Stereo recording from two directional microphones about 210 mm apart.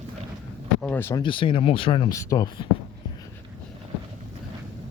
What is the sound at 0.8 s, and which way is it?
Speech, 10° left (ahead or behind).